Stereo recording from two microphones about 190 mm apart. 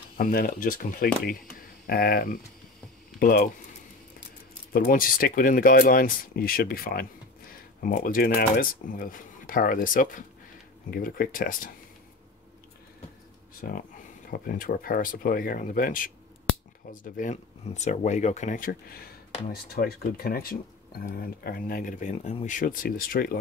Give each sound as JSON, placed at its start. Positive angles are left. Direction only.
{"t": 0.2, "sound": "speech", "side_deg": 50}
{"t": 4.7, "sound": "speech", "side_deg": 50}
{"t": 13.6, "sound": "speech", "side_deg": 50}